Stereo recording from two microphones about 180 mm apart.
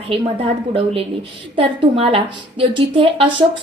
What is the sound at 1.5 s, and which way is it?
A woman's voice, 30° right (ahead or behind).